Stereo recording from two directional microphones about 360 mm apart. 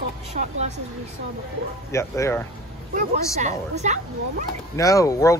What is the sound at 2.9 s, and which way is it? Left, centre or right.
A woman's voice, centre.